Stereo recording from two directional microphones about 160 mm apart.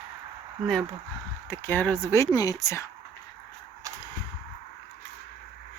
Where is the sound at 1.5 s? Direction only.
10° left (ahead or behind).